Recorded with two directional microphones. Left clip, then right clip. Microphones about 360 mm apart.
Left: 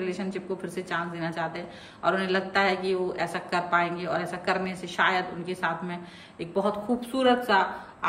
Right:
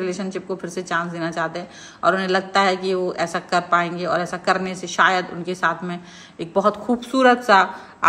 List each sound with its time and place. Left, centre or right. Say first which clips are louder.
0.0 s a woman's voice: right 6 dB; centre